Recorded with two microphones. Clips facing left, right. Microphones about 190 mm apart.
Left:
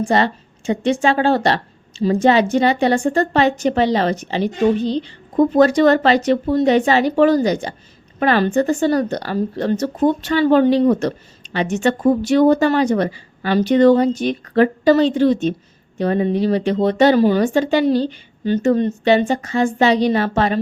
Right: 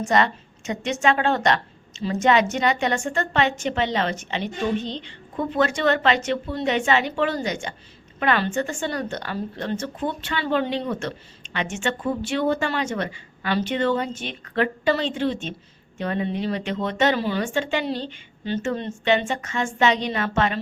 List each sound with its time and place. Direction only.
0.0 s speech: 30° left (ahead or behind)